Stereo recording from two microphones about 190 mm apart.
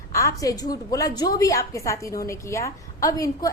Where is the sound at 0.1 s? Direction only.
15° left (ahead or behind).